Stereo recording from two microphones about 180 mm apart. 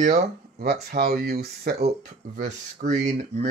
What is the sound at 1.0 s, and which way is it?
Speech, 60° right (ahead or behind).